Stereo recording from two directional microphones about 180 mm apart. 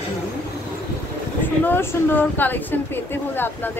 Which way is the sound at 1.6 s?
10° left (ahead or behind).